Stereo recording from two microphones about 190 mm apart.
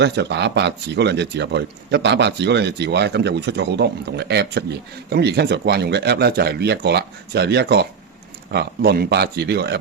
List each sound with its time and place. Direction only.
0.0 s speech: 65° right (ahead or behind)